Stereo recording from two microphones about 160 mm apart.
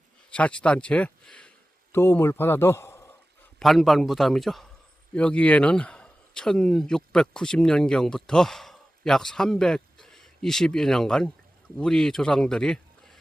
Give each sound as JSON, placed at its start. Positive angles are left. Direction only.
{"t": 0.3, "sound": "a man's voice", "side_deg": 5}
{"t": 3.6, "sound": "a man's voice", "side_deg": 0}